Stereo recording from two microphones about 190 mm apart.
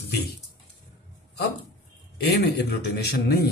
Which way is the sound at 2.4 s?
60° left (ahead or behind).